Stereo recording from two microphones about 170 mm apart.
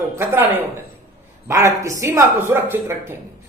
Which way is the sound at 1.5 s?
15° right (ahead or behind).